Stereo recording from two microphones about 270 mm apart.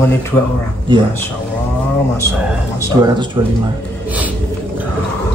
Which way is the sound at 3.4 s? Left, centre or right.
Centre.